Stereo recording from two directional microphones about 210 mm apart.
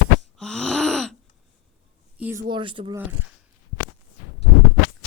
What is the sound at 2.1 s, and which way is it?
Speech, 10° right (ahead or behind).